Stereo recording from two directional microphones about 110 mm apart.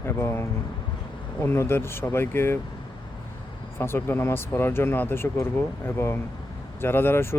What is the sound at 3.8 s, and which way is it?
Speech, 20° left (ahead or behind).